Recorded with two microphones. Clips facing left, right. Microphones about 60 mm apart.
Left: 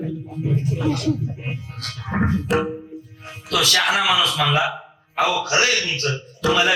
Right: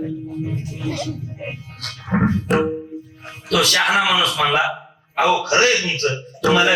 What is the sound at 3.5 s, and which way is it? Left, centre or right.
Speech, right.